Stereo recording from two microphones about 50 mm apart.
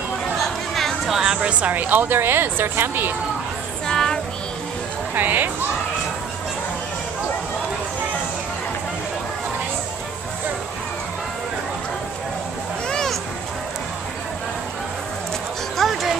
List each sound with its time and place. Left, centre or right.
0.7 s music: centre
1.1 s music: centre
1.5 s speech: right
3.8 s music: centre
5.1 s speech: right
12.8 s a sound: centre
15.8 s music: centre